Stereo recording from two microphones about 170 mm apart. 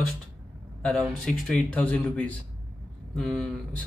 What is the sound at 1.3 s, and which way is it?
Mantra, 5° left (ahead or behind).